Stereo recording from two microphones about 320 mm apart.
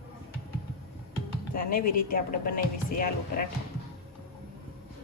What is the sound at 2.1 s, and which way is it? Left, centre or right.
Speech, left.